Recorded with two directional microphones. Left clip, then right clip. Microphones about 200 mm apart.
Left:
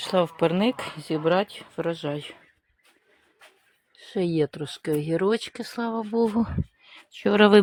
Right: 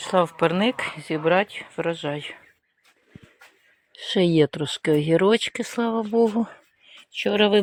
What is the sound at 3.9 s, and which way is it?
Speech, 15° right (ahead or behind).